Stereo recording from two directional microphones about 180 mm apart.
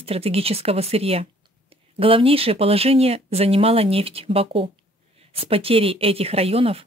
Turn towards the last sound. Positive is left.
turn(degrees=-35)  # may be behind; listen again after turning